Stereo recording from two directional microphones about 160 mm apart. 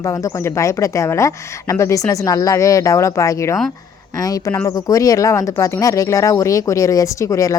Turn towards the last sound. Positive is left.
turn(degrees=20)  # may be behind; listen again after turning